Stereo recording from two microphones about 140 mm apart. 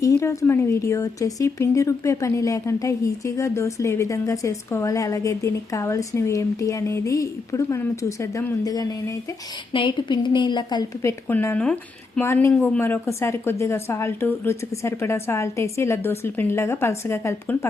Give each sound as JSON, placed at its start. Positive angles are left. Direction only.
{"t": 0.0, "sound": "a woman's voice", "side_deg": 20}
{"t": 11.3, "sound": "a woman's voice", "side_deg": 15}
{"t": 12.2, "sound": "a woman's voice", "side_deg": 20}